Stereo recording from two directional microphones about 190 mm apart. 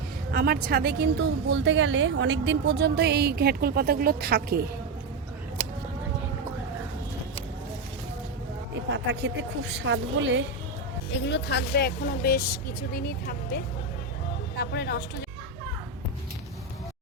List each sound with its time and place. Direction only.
0.3 s speech: 55° right (ahead or behind)
9.2 s speech: 70° right (ahead or behind)
11.1 s speech: 65° left (ahead or behind)